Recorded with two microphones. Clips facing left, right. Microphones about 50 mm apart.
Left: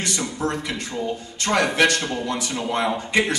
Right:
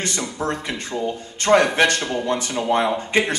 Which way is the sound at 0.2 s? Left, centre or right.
Right.